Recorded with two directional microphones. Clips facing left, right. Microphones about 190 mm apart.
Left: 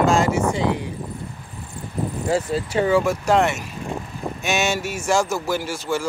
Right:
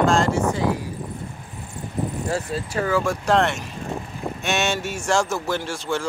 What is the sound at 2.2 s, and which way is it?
Speech, 25° left (ahead or behind).